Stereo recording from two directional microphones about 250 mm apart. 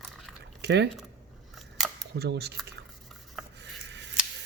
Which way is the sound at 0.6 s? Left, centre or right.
Right.